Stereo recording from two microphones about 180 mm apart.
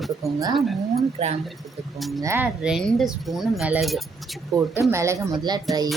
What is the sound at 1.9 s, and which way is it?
Speech, centre (ahead or behind).